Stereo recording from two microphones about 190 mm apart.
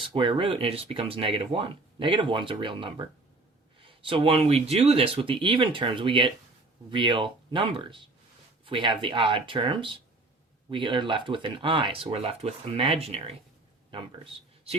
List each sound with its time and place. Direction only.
0.0 s speech: 25° right (ahead or behind)